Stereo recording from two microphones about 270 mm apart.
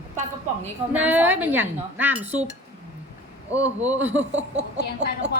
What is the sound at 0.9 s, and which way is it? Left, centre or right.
Speech, centre.